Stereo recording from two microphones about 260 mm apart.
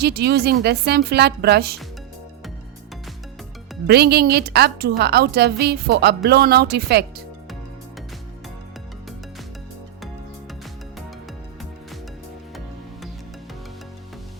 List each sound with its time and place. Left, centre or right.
0.0 s a woman's voice: right
3.8 s a woman's voice: right